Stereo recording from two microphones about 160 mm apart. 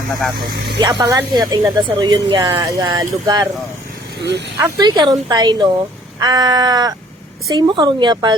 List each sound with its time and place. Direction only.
0.8 s speech: 25° right (ahead or behind)
4.2 s speech: 90° right
4.5 s speech: 25° right (ahead or behind)